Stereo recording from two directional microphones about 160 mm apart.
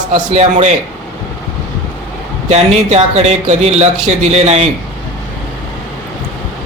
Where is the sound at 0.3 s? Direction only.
45° right (ahead or behind).